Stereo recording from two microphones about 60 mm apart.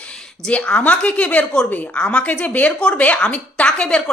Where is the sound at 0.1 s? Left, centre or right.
Centre.